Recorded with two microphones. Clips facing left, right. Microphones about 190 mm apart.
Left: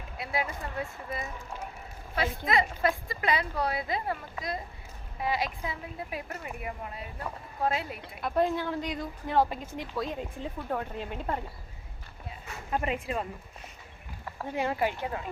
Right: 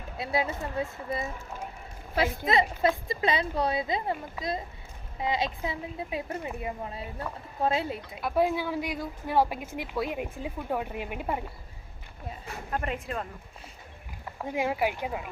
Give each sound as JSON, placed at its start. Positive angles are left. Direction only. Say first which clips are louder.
{"t": 0.2, "sound": "speech", "louder": "right 4 dB", "side_deg": -25}
{"t": 2.5, "sound": "speech", "louder": "right 1 dB", "side_deg": -20}
{"t": 8.2, "sound": "speech", "louder": "right 1 dB", "side_deg": -5}
{"t": 12.7, "sound": "speech", "louder": "left 2 dB", "side_deg": 5}
{"t": 14.3, "sound": "speech", "louder": "right 1 dB", "side_deg": -10}